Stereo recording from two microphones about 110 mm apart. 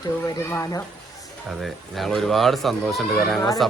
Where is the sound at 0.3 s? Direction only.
30° left (ahead or behind).